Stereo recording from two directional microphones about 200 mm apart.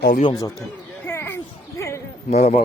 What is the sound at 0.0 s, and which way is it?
Speech, 45° left (ahead or behind).